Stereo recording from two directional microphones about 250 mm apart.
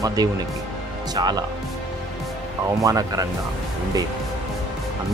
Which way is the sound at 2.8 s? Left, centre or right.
Centre.